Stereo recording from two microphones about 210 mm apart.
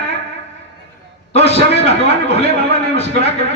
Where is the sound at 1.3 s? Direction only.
30° left (ahead or behind).